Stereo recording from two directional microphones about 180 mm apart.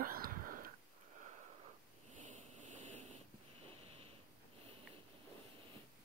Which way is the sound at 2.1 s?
45° right (ahead or behind).